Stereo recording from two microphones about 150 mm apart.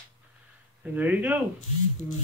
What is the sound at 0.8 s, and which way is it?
Speech, 10° right (ahead or behind).